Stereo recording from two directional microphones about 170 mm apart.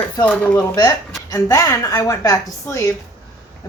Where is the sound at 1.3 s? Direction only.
20° left (ahead or behind).